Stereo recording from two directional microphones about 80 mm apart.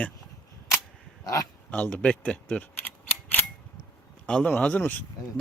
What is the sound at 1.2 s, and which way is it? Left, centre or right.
Speech, left.